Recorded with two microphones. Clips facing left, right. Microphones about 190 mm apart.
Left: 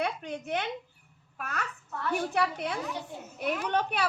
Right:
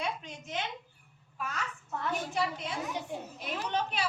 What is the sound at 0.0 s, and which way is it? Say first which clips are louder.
A child's voice: left 5 dB; 60° left (ahead or behind).